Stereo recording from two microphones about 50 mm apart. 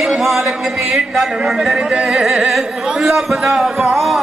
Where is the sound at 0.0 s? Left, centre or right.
Centre.